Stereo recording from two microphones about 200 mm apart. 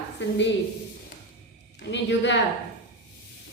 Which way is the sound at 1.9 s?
60° left (ahead or behind).